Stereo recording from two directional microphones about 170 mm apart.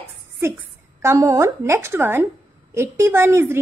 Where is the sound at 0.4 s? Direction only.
15° right (ahead or behind).